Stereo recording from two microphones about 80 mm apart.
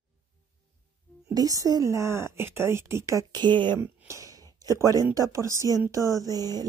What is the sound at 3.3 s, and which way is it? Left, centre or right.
Speech, right.